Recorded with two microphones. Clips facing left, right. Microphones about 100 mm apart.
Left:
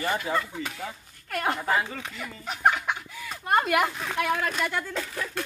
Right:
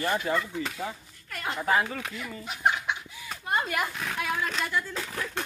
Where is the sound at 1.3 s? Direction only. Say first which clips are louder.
Left 7 dB; 55° left (ahead or behind).